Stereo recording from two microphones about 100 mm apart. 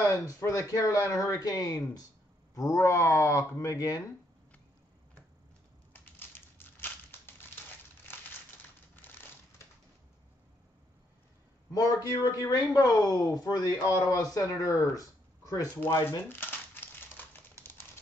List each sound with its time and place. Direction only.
0.0 s a man's voice: 30° left (ahead or behind)
5.9 s a sound: 20° left (ahead or behind)
8.9 s crumpling: 20° left (ahead or behind)
11.7 s a man's voice: 40° left (ahead or behind)
15.7 s speech: 20° left (ahead or behind)
17.2 s typewriter: 20° left (ahead or behind)